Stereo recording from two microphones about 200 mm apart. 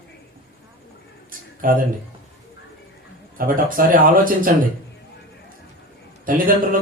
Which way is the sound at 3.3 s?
45° right (ahead or behind).